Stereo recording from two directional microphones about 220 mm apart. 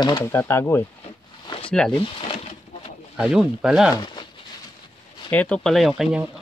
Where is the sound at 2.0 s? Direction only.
25° left (ahead or behind).